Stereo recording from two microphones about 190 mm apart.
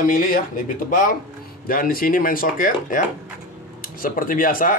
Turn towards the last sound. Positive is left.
turn(degrees=45)  # may be behind; listen again after turning